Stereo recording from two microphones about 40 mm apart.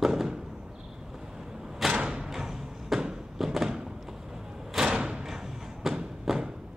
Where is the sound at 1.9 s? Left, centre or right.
Right.